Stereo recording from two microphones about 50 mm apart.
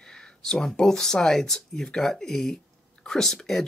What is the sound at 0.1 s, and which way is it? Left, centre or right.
Speech, centre.